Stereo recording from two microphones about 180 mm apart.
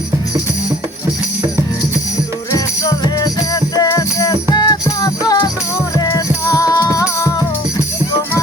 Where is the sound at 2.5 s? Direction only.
20° left (ahead or behind).